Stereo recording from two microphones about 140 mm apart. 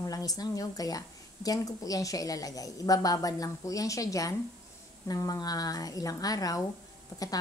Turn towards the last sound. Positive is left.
turn(degrees=25)  # may be behind; listen again after turning